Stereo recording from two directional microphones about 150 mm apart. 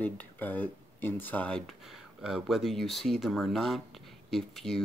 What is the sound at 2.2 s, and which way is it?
Speech, centre (ahead or behind).